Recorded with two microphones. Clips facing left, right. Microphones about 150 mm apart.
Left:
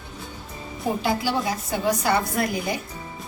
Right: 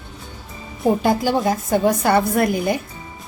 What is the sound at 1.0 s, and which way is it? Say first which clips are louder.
A woman's voice: right 6 dB; 50° right (ahead or behind).